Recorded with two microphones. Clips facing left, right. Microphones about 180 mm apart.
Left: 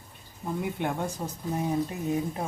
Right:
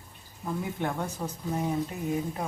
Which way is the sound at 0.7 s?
15° left (ahead or behind).